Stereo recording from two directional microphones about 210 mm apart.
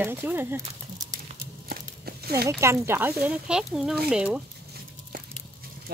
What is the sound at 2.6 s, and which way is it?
Speech, 10° right (ahead or behind).